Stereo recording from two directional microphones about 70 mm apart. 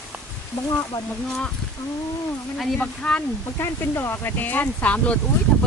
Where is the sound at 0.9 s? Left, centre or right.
Left.